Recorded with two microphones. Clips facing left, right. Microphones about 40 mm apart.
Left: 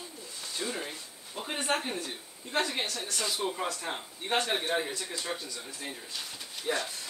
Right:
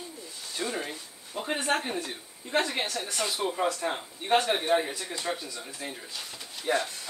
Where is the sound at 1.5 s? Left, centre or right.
Centre.